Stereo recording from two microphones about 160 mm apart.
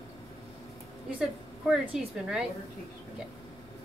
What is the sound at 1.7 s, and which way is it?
Speech, 5° right (ahead or behind).